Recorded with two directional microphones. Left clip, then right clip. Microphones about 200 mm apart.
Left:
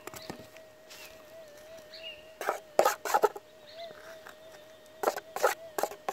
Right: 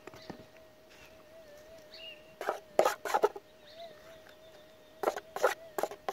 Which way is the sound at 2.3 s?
5° right (ahead or behind).